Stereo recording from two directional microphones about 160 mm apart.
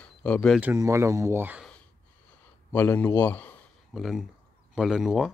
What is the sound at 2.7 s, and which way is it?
A man's voice, 10° left (ahead or behind).